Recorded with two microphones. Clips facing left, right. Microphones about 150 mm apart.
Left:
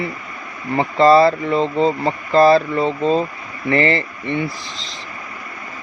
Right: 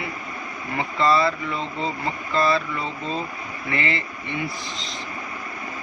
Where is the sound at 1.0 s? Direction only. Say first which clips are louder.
Left 9 dB; 50° left (ahead or behind).